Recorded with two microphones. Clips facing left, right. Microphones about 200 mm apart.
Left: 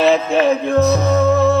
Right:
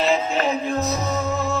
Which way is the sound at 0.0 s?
60° left (ahead or behind).